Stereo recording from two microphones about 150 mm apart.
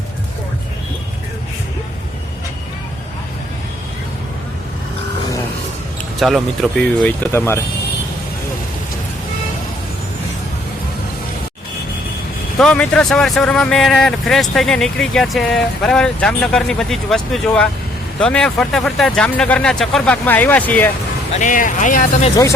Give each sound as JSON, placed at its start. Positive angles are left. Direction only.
{"t": 6.1, "sound": "speech", "side_deg": 0}
{"t": 12.5, "sound": "speech", "side_deg": 5}
{"t": 21.3, "sound": "speech", "side_deg": 60}